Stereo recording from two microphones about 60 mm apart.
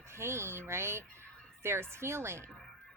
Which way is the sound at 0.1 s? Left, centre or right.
Right.